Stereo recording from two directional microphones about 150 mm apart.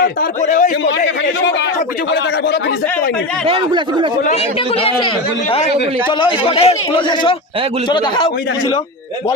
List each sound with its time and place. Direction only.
0.4 s a man's voice: 55° left (ahead or behind)
3.4 s speech: 35° right (ahead or behind)
4.8 s a man's voice: 40° left (ahead or behind)